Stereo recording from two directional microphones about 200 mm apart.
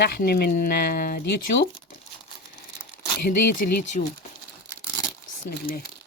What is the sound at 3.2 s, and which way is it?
Speech, 45° left (ahead or behind).